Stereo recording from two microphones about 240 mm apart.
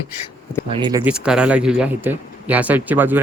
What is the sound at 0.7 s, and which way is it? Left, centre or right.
Speech, centre.